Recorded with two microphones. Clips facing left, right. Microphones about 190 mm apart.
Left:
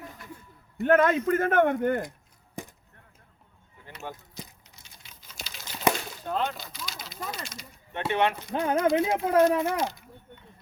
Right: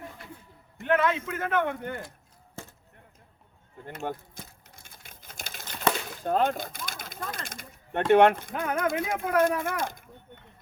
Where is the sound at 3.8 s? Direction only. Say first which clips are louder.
Right 6 dB; 50° right (ahead or behind).